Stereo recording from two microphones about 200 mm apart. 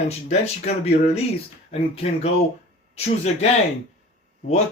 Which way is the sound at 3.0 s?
35° left (ahead or behind).